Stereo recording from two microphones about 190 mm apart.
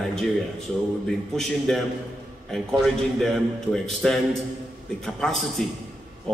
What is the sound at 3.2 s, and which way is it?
Speech, centre (ahead or behind).